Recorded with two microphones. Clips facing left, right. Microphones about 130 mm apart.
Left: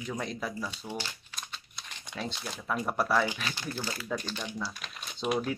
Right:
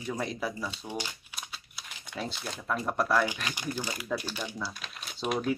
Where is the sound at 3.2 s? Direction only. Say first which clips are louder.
Right 1 dB; 15° right (ahead or behind).